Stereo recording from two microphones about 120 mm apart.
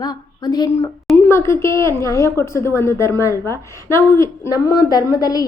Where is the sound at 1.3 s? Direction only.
20° left (ahead or behind).